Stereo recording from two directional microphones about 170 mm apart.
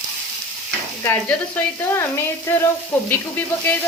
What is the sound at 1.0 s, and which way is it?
Speech, 10° left (ahead or behind).